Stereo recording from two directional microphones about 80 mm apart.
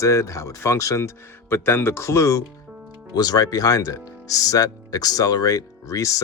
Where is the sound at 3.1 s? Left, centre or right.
Left.